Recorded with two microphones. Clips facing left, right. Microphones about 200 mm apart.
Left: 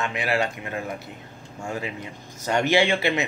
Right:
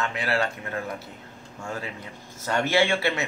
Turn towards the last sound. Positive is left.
turn(degrees=15)  # may be behind; listen again after turning